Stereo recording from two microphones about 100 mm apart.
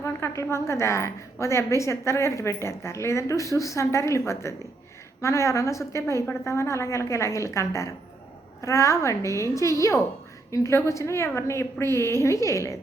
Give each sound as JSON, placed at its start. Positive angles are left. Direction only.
{"t": 0.0, "sound": "a woman's voice", "side_deg": 25}